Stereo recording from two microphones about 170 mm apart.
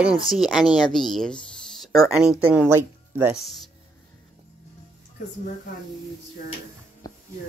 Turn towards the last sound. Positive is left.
turn(degrees=20)  # may be behind; listen again after turning